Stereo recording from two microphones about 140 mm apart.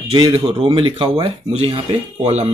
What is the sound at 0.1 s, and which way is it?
Speech, 40° right (ahead or behind).